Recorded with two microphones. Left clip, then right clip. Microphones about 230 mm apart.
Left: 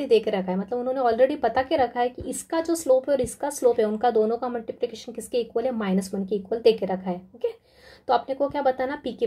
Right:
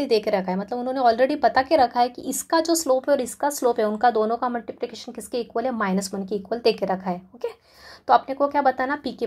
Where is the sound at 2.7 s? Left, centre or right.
Centre.